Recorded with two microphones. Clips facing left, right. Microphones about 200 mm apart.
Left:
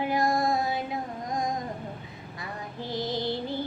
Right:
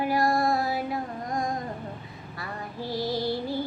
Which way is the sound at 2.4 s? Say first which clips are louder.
Right 2 dB; 20° left (ahead or behind).